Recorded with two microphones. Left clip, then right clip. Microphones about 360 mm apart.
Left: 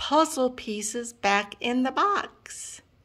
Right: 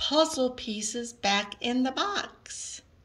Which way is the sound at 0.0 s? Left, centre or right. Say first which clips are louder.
Left 2 dB; centre.